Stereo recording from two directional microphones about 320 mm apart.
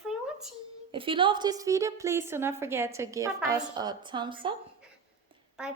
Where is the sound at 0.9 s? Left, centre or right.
Centre.